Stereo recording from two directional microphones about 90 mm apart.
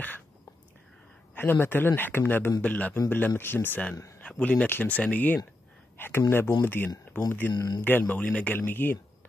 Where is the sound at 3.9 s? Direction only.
35° left (ahead or behind).